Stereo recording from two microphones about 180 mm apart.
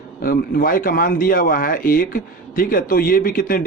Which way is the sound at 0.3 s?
50° left (ahead or behind).